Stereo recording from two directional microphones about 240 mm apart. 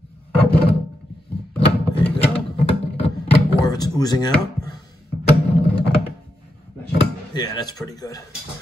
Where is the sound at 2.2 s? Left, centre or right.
Left.